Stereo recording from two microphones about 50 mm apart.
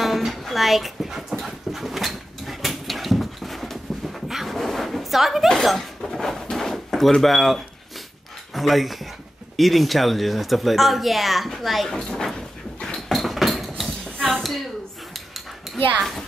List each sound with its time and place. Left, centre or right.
0.0 s a sound: centre
1.3 s dog: centre
5.5 s drawer open or close: centre
8.5 s speech: centre
11.9 s speech: centre
12.8 s a sound: centre
16.0 s speech: centre